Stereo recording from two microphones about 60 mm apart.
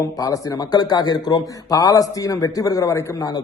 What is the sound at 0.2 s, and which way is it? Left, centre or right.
A man's voice, left.